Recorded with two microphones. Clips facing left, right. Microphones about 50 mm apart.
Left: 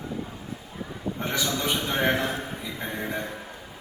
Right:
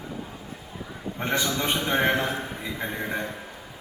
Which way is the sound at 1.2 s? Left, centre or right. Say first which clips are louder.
Right 2 dB; right.